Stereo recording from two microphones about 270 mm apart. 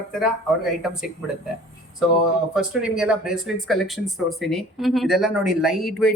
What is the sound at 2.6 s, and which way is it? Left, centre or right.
Speech, centre.